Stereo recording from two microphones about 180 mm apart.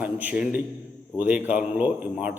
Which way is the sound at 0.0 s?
10° right (ahead or behind).